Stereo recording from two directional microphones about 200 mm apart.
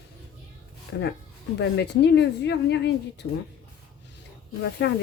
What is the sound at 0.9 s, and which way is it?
Speech, 60° left (ahead or behind).